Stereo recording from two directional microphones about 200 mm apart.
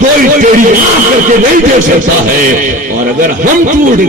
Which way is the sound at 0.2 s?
45° right (ahead or behind).